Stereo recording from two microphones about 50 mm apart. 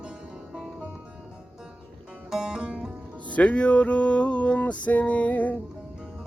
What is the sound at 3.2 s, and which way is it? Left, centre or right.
Music, left.